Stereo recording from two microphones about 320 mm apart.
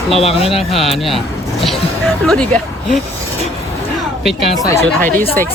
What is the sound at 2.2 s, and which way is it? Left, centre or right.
Speech, centre.